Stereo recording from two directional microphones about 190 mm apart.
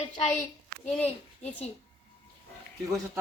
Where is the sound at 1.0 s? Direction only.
35° left (ahead or behind).